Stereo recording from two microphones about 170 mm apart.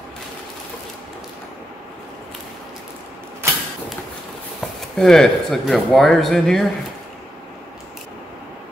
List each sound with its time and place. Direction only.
3.4 s creak: 15° right (ahead or behind)
4.9 s speech: 5° left (ahead or behind)